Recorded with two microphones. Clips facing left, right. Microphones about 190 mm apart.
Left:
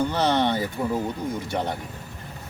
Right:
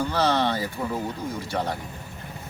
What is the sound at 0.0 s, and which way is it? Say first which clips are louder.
A man's voice: left 1 dB; 20° left (ahead or behind).